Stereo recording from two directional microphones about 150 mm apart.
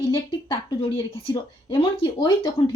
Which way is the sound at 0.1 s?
30° left (ahead or behind).